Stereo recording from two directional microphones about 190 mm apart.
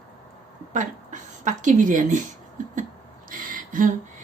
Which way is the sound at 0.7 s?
40° right (ahead or behind).